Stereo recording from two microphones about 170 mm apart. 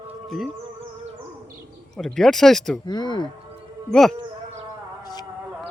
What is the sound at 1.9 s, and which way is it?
Speech, 5° left (ahead or behind).